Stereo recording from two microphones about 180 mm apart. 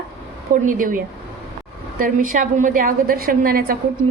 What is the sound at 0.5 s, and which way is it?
A woman's voice, 50° right (ahead or behind).